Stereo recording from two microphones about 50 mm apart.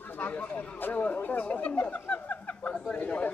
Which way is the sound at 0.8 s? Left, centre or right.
Left.